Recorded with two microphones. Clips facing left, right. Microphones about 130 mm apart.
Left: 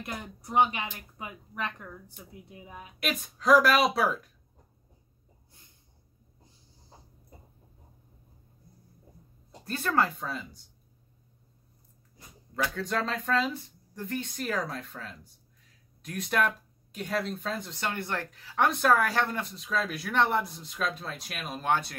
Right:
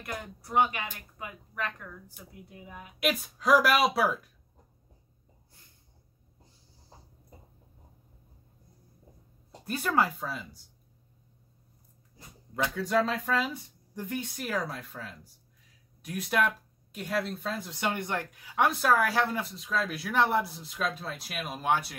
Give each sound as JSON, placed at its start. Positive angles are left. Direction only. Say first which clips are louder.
{"t": 0.0, "sound": "speech", "louder": "even", "side_deg": 20}
{"t": 3.0, "sound": "speech", "louder": "right 3 dB", "side_deg": -5}
{"t": 9.7, "sound": "speech", "louder": "even", "side_deg": -10}
{"t": 12.7, "sound": "speech", "louder": "right 8 dB", "side_deg": -5}